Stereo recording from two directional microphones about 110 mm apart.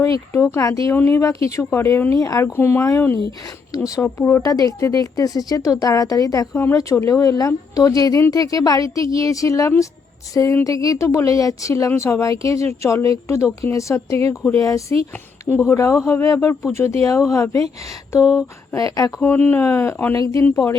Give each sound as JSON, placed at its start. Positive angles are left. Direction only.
{"t": 0.0, "sound": "speech", "side_deg": 30}
{"t": 4.4, "sound": "speech", "side_deg": 35}
{"t": 19.2, "sound": "speech", "side_deg": 20}
{"t": 20.1, "sound": "speech", "side_deg": 30}